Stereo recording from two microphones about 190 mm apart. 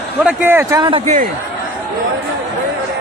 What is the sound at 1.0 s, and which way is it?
Speech, 40° right (ahead or behind).